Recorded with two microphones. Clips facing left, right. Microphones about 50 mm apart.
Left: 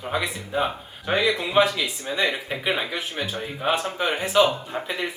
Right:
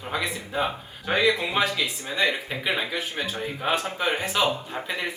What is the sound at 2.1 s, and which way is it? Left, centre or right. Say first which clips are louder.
Speech: even; centre.